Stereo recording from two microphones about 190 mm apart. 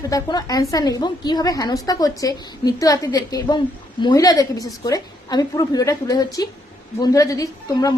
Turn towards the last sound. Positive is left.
turn(degrees=15)  # may be behind; listen again after turning